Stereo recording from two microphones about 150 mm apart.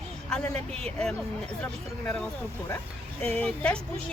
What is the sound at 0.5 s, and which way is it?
Speech, 45° right (ahead or behind).